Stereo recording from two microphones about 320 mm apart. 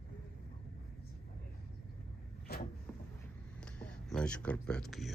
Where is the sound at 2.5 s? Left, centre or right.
Left.